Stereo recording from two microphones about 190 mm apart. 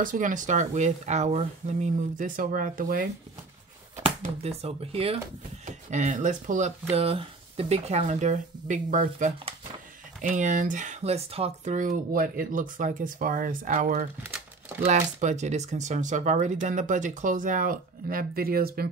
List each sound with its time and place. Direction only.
0.0 s speech: 45° right (ahead or behind)
4.4 s speech: 35° right (ahead or behind); by 18.9 s 55° right (ahead or behind)